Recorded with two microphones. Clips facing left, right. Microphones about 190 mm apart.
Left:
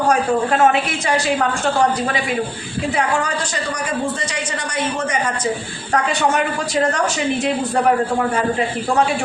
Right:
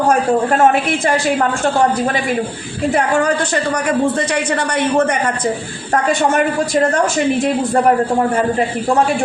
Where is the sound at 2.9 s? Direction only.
55° right (ahead or behind).